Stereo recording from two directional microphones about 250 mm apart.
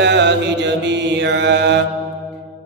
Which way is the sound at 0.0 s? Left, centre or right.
Right.